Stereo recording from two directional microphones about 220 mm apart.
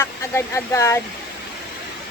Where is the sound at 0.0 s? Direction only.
10° left (ahead or behind).